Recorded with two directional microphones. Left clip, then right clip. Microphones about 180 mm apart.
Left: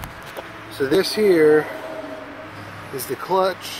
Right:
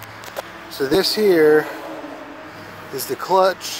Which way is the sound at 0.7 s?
15° right (ahead or behind).